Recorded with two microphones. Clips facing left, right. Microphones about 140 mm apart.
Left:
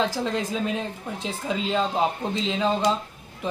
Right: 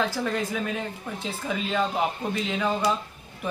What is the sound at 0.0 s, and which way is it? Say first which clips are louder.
Speech: left 1 dB; 20° left (ahead or behind).